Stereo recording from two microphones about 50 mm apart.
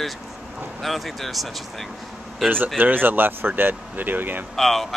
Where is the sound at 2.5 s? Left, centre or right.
Right.